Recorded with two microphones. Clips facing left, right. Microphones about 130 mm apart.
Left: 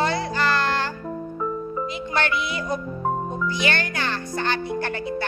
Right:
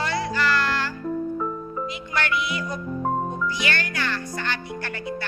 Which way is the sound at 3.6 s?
25° left (ahead or behind).